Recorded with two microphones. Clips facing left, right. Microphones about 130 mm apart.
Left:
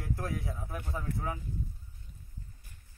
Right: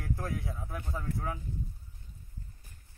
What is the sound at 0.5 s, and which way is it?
Speech, 5° left (ahead or behind).